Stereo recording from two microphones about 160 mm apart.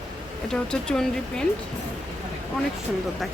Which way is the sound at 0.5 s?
5° left (ahead or behind).